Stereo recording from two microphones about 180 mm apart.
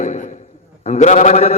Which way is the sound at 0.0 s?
45° left (ahead or behind).